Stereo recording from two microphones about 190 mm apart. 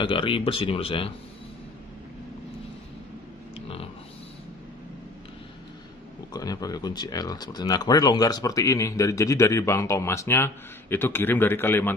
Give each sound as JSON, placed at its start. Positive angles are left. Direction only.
{"t": 0.0, "sound": "speech", "side_deg": 25}
{"t": 3.5, "sound": "a sound", "side_deg": 30}
{"t": 6.3, "sound": "speech", "side_deg": 20}